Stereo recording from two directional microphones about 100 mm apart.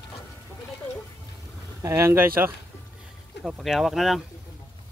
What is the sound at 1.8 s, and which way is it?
Speech, 30° right (ahead or behind).